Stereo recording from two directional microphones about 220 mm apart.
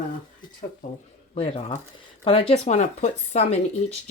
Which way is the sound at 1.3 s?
25° left (ahead or behind).